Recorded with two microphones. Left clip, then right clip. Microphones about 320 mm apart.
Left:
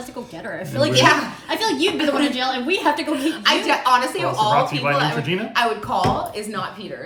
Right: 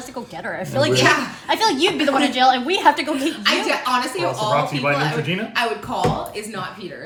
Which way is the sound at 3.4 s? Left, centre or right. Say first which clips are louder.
Left 2 dB; centre.